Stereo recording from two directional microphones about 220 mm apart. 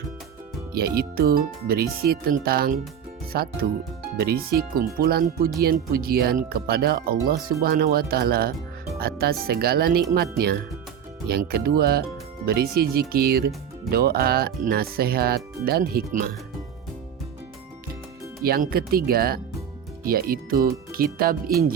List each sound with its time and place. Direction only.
0.7 s speech: 45° right (ahead or behind)
18.4 s speech: 45° right (ahead or behind)